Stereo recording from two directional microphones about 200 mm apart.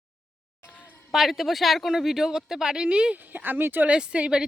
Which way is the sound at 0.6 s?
10° left (ahead or behind).